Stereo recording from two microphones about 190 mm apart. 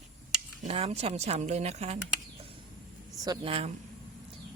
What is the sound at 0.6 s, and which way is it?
A woman's voice, 35° right (ahead or behind).